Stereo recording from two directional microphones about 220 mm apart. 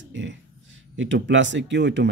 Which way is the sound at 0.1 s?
55° right (ahead or behind).